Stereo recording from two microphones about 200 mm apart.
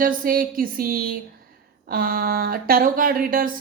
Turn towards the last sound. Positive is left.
turn(degrees=-45)  # may be behind; listen again after turning